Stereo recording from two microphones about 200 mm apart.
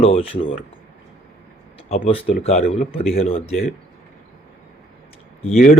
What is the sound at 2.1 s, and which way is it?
Speech, 30° left (ahead or behind).